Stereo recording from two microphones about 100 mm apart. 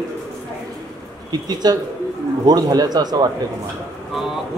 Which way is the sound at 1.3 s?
45° right (ahead or behind).